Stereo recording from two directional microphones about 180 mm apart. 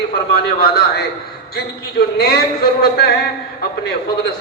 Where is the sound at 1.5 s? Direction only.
65° left (ahead or behind).